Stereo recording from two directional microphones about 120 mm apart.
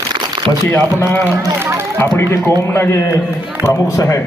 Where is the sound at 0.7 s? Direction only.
20° left (ahead or behind).